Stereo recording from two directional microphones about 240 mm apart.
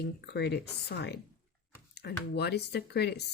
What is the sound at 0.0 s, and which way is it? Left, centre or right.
Speech, left.